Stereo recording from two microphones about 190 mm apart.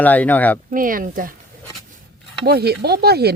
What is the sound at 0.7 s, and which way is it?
Speech, 45° right (ahead or behind).